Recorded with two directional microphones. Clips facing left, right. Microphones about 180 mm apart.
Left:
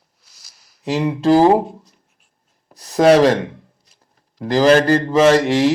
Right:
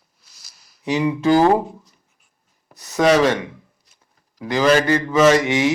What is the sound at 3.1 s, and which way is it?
Speech, 35° left (ahead or behind).